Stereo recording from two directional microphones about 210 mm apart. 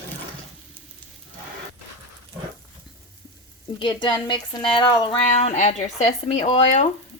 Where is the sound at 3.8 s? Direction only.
20° left (ahead or behind).